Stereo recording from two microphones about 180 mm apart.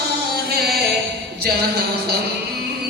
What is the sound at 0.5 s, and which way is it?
Music, 60° right (ahead or behind).